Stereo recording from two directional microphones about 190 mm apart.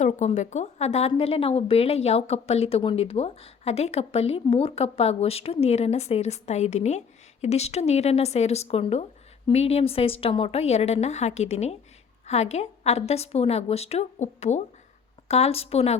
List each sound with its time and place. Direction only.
0.0 s speech: 40° left (ahead or behind)